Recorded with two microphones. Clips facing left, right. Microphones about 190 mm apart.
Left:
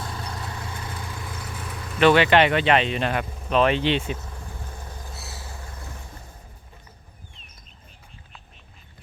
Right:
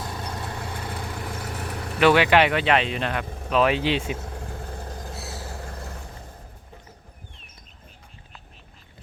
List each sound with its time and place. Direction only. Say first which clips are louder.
0.4 s vehicle: right 2 dB; 55° right (ahead or behind)
1.6 s vehicle: right 4 dB; 65° right (ahead or behind)
2.0 s speech: left 1 dB; 10° right (ahead or behind)
4.2 s vehicle: right 4 dB; 55° right (ahead or behind)
4.8 s vehicle: right 5 dB; 40° right (ahead or behind)